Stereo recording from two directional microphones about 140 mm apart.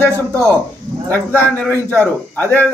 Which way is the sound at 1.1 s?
15° left (ahead or behind).